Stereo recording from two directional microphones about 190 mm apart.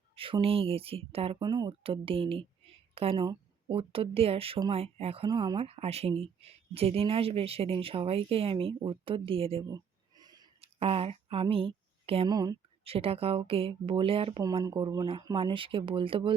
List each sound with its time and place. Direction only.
0.2 s speech: 30° right (ahead or behind)
12.8 s speech: 30° right (ahead or behind)